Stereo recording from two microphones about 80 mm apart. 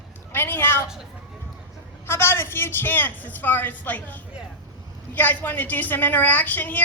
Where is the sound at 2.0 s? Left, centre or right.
Left.